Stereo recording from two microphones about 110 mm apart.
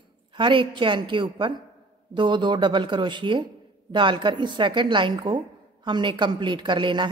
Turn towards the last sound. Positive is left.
turn(degrees=-45)  # may be behind; listen again after turning